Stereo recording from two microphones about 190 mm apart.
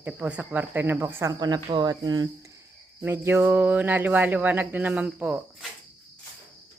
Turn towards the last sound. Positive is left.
turn(degrees=-5)  # may be behind; listen again after turning